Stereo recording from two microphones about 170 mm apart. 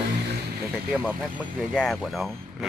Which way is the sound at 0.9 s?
5° right (ahead or behind).